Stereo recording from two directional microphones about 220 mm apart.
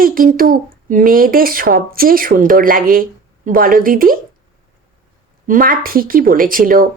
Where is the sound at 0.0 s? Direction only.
40° right (ahead or behind).